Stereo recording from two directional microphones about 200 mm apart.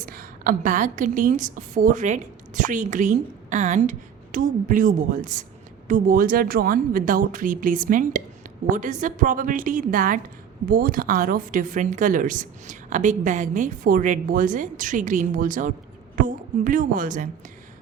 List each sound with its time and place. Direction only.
0.0 s a woman's voice: 45° right (ahead or behind)